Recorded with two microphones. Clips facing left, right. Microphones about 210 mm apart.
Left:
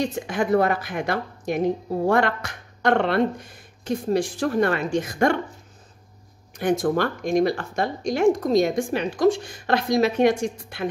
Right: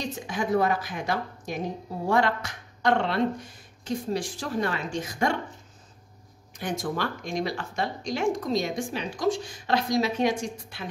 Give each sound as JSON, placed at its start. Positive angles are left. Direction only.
{"t": 0.0, "sound": "speech", "side_deg": 60}
{"t": 6.6, "sound": "speech", "side_deg": 55}